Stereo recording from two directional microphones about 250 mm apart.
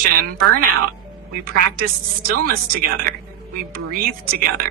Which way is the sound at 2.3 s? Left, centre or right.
Right.